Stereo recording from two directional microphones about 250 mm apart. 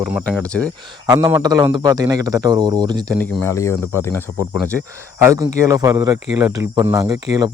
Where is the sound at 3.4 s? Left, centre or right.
Centre.